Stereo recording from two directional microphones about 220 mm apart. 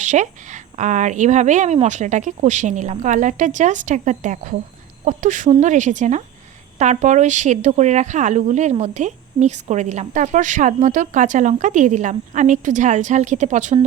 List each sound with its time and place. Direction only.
0.0 s speech: 35° right (ahead or behind)